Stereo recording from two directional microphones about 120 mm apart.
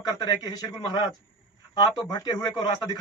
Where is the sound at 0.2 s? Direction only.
35° left (ahead or behind).